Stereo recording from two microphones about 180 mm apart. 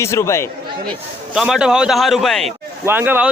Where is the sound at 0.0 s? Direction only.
15° left (ahead or behind).